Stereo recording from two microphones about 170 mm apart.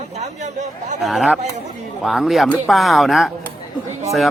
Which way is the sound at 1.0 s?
Centre (ahead or behind).